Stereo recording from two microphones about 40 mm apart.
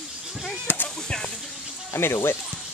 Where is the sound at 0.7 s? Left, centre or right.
Left.